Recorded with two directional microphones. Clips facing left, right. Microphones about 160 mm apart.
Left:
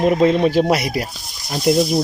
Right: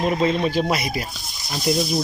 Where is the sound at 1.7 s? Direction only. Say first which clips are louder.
Left 6 dB; 55° left (ahead or behind).